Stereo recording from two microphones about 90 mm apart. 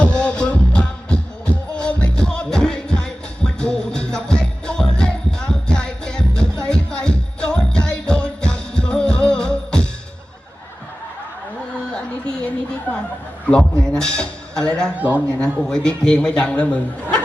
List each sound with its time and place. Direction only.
0.0 s music: 10° left (ahead or behind)
13.5 s a sound: 10° left (ahead or behind)
14.9 s speech: 15° right (ahead or behind)
15.5 s a man's voice: 5° left (ahead or behind)